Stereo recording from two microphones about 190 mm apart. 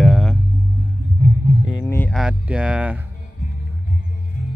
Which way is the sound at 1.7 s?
15° left (ahead or behind).